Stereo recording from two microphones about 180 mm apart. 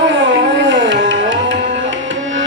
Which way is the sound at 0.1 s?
90° right.